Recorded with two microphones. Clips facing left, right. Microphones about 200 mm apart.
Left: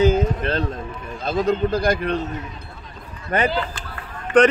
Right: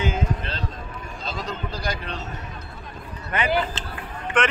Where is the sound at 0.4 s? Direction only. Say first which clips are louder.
Left 9 dB; 55° left (ahead or behind).